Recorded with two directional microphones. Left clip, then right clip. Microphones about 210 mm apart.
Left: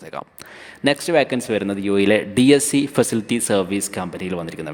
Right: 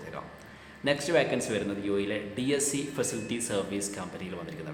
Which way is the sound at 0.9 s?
50° left (ahead or behind).